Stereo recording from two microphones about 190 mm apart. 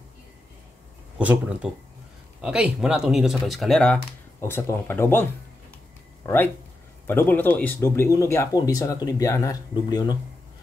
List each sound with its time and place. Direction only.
1.1 s speech: 5° right (ahead or behind); by 5.2 s 10° left (ahead or behind)
6.2 s speech: 10° left (ahead or behind)